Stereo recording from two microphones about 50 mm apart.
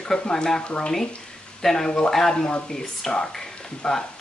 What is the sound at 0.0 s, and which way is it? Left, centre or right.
Speech, centre.